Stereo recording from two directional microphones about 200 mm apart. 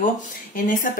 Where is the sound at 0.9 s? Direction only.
45° left (ahead or behind).